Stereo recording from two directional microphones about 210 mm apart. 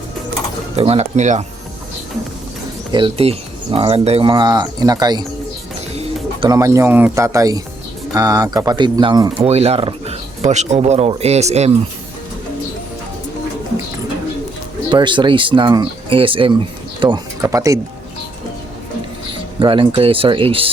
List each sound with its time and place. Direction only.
0.8 s speech: 30° right (ahead or behind)
2.9 s speech: 25° right (ahead or behind)
6.4 s speech: 15° right (ahead or behind); by 11.7 s 30° right (ahead or behind)
14.8 s speech: 20° right (ahead or behind)
19.5 s speech: 25° right (ahead or behind)